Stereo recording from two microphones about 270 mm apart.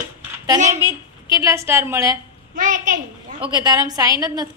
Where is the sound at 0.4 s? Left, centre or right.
Centre.